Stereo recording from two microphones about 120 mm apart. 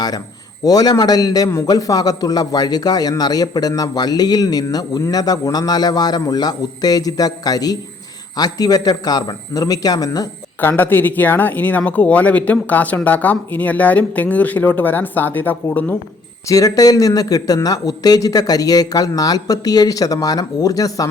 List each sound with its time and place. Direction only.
0.6 s a man's voice: 30° left (ahead or behind)
10.6 s speech: 15° left (ahead or behind)
16.5 s a man's voice: 30° left (ahead or behind)